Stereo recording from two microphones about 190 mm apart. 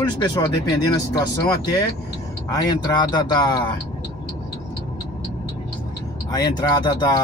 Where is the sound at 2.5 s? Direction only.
25° left (ahead or behind).